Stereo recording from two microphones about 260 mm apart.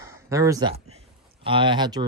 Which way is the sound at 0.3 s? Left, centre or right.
Centre.